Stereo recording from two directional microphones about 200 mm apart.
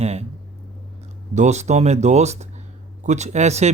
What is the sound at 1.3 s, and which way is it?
Speech, 35° right (ahead or behind).